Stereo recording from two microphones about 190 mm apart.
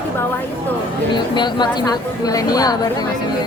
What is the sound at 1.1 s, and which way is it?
A woman's voice, 25° left (ahead or behind).